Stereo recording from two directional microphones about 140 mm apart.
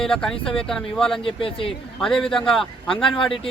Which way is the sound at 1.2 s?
40° left (ahead or behind).